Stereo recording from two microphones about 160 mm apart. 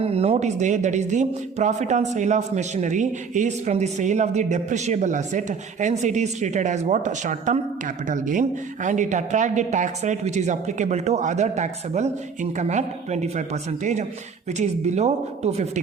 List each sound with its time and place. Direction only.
0.0 s speech: 40° right (ahead or behind)